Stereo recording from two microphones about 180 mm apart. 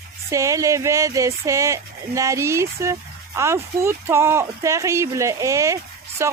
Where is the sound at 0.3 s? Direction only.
15° right (ahead or behind).